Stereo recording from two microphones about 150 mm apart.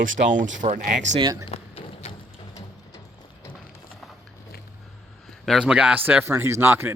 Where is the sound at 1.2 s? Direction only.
25° right (ahead or behind).